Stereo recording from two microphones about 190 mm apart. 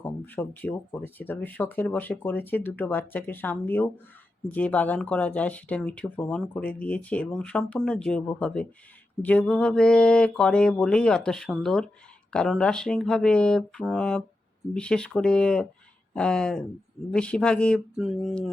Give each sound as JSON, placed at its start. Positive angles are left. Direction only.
{"t": 0.0, "sound": "speech", "side_deg": 10}